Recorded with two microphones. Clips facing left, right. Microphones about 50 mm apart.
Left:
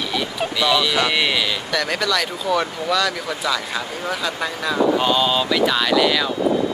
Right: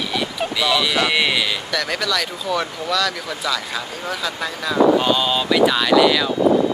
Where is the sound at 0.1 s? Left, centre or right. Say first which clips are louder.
Even; centre.